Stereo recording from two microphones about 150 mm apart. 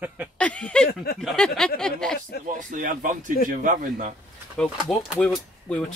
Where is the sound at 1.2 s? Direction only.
5° left (ahead or behind).